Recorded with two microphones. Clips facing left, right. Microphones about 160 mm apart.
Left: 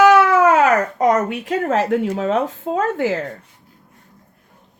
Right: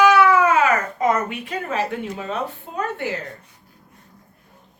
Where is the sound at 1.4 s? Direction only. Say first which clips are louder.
Left 6 dB; 85° left.